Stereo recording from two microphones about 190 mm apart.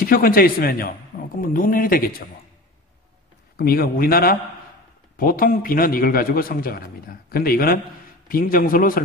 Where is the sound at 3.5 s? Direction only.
50° left (ahead or behind).